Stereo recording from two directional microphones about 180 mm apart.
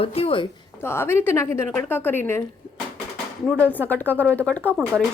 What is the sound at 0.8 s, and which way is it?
Speech, 15° left (ahead or behind).